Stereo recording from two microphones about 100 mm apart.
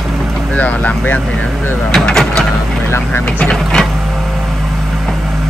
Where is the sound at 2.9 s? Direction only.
20° left (ahead or behind).